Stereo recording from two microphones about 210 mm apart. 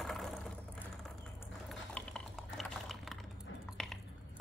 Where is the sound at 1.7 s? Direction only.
5° left (ahead or behind).